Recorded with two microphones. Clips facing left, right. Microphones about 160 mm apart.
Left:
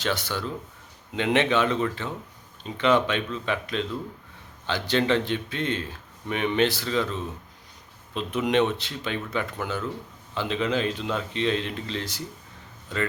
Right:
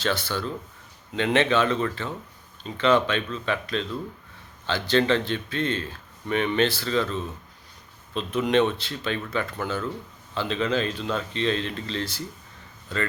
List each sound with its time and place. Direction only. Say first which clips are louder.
0.0 s speech: right 1 dB; 15° left (ahead or behind)